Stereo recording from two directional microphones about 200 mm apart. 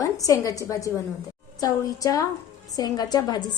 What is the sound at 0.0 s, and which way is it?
A woman's voice, 15° left (ahead or behind).